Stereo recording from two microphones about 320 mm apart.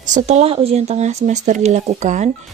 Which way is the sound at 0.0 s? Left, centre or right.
Right.